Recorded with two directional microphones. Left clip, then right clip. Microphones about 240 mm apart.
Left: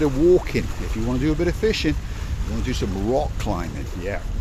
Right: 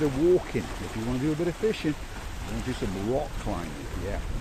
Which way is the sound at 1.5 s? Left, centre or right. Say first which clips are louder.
Left 6 dB; left.